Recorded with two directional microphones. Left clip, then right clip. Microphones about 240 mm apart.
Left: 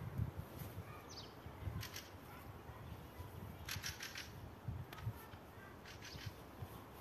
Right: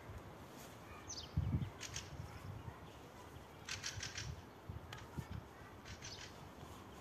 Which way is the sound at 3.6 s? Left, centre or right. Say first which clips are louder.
Right 1 dB; centre.